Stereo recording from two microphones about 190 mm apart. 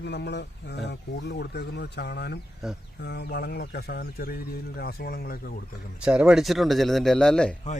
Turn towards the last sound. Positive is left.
turn(degrees=5)  # may be behind; listen again after turning